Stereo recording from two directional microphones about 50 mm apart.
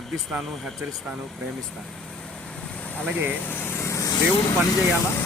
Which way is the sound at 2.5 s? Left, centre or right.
Left.